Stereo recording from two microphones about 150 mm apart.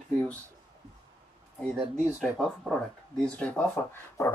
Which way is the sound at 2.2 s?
Centre (ahead or behind).